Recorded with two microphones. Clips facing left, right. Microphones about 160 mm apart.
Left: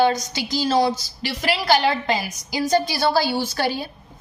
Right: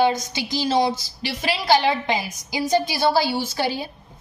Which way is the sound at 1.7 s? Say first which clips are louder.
Right 1 dB; 15° right (ahead or behind).